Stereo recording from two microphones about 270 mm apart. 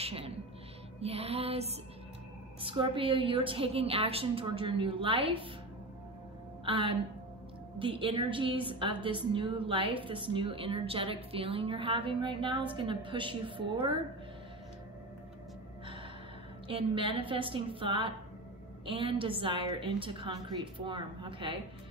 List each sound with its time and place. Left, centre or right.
0.0 s music: right
1.0 s a woman's voice: right
6.6 s a woman's voice: centre
16.6 s a woman's voice: centre